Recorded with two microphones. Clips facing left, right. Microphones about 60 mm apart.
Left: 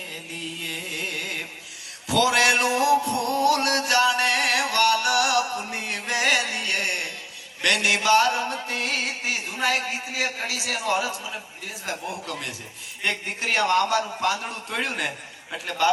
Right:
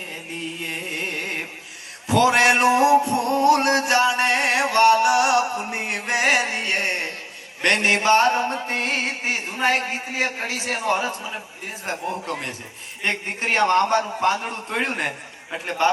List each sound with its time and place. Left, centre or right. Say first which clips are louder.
0.6 s carnatic music: right 3 dB; right
2.0 s music: right 4 dB; right
11.9 s a man's voice: right 4 dB; right